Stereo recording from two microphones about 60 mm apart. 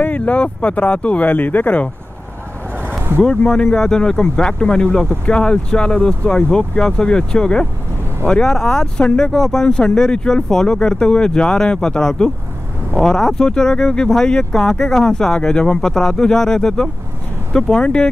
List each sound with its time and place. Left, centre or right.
0.0 s speech: left
3.2 s speech: centre